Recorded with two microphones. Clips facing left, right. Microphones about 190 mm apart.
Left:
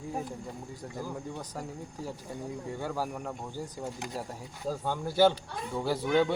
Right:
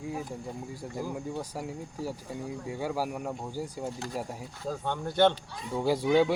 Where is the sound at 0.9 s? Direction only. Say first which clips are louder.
Right 4 dB; 10° right (ahead or behind).